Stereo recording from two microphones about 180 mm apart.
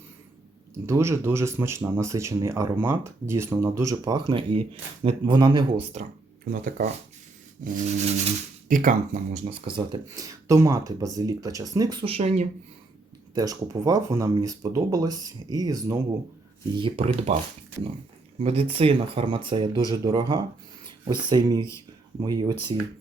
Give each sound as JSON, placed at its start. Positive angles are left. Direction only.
{"t": 0.9, "sound": "speech", "side_deg": -15}
{"t": 5.9, "sound": "speech", "side_deg": -45}
{"t": 7.6, "sound": "speech", "side_deg": -40}
{"t": 9.5, "sound": "speech", "side_deg": -25}
{"t": 13.3, "sound": "speech", "side_deg": -20}
{"t": 16.7, "sound": "speech", "side_deg": -30}
{"t": 18.3, "sound": "speech", "side_deg": -30}